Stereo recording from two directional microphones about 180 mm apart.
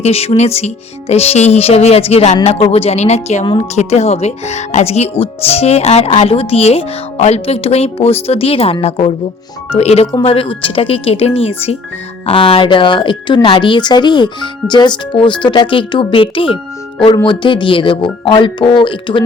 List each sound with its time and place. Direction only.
0.0 s speech: 35° left (ahead or behind)